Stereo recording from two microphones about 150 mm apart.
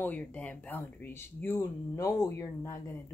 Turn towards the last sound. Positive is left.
turn(degrees=15)  # may be behind; listen again after turning